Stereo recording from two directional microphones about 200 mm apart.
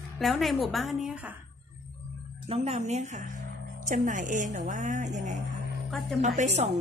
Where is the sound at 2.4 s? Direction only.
30° right (ahead or behind).